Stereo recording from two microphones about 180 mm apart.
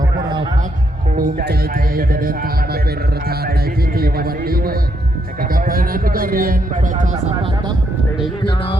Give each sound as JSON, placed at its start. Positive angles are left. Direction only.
{"t": 1.1, "sound": "speech", "side_deg": -55}
{"t": 3.9, "sound": "a man's voice", "side_deg": -55}